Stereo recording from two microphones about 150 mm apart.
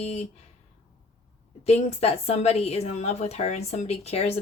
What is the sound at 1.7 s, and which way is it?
Speech, 45° left (ahead or behind).